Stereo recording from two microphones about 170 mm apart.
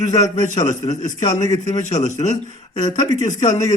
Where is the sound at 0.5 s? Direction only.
45° left (ahead or behind).